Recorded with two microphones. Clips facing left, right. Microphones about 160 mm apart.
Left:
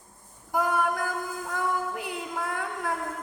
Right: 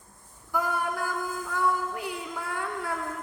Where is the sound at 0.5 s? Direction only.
60° left (ahead or behind).